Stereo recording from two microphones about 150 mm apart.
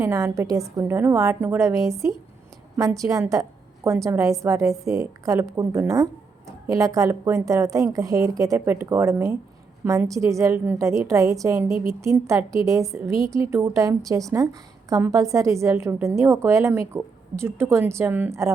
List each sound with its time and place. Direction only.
0.0 s a woman's voice: 20° right (ahead or behind)